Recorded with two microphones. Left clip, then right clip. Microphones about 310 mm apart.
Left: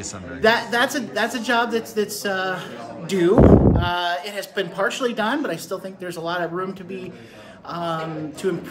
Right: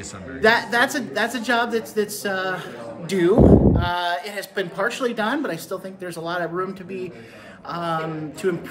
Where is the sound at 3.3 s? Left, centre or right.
Centre.